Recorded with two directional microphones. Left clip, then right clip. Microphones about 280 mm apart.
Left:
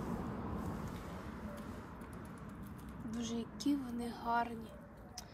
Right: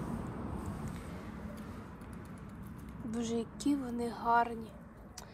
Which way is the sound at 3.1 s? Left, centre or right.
Centre.